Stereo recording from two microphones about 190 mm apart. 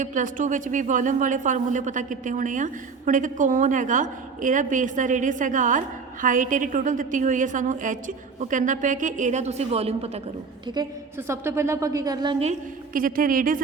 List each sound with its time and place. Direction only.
0.0 s a woman's voice: 45° right (ahead or behind)
11.3 s a woman's voice: 15° right (ahead or behind)
12.5 s a woman's voice: 45° right (ahead or behind)